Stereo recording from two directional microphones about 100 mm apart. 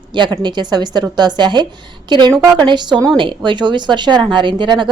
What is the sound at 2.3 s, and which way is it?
A woman's voice, 35° right (ahead or behind).